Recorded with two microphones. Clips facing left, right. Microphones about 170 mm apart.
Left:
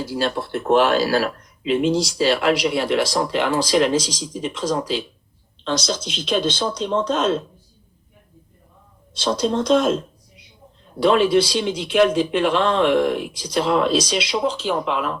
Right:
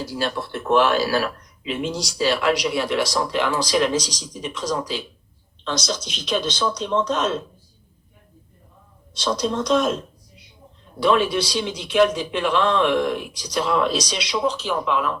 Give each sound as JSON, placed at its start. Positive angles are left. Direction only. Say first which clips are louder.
{"t": 0.3, "sound": "speech", "louder": "left 2 dB", "side_deg": 30}
{"t": 9.1, "sound": "speech", "louder": "left 3 dB", "side_deg": 30}
{"t": 11.0, "sound": "speech", "louder": "left 4 dB", "side_deg": 30}